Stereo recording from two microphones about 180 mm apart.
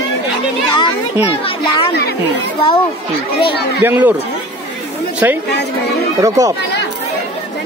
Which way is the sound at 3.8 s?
10° right (ahead or behind).